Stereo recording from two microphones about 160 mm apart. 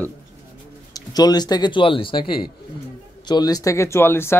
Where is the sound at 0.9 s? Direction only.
25° left (ahead or behind).